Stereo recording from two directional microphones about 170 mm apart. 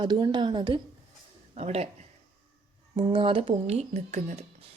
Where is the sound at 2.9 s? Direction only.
30° right (ahead or behind).